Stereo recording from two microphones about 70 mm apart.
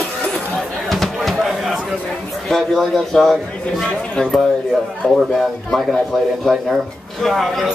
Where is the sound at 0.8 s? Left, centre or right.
Centre.